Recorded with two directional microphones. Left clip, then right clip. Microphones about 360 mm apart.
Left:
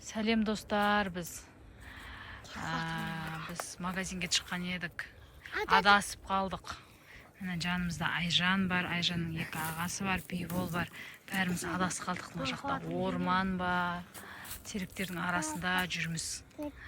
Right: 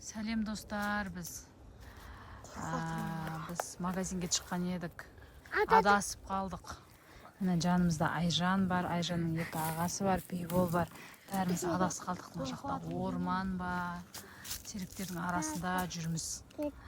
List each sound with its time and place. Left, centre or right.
0.1 s a woman's voice: centre
2.5 s speech: centre
5.5 s a sound: right
5.7 s speech: centre
7.4 s speech: centre